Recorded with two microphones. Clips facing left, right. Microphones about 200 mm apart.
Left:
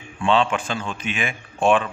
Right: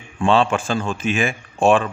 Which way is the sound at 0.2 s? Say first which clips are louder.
Right 3 dB; 45° right (ahead or behind).